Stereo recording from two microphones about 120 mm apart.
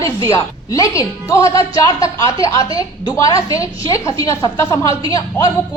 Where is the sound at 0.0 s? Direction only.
30° left (ahead or behind).